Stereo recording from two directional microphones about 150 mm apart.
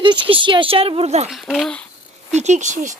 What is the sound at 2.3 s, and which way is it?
Speech, 50° right (ahead or behind).